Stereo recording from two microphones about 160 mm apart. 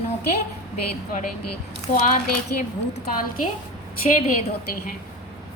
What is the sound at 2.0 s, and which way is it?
Speech, 60° left (ahead or behind).